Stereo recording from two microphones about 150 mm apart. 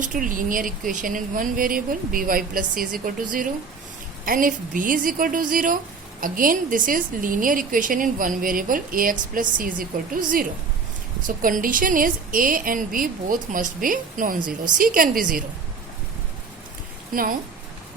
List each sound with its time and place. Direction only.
0.0 s a woman's voice: 60° right (ahead or behind)